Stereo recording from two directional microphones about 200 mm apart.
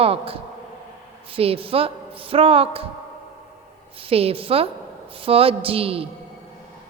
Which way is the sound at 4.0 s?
30° right (ahead or behind).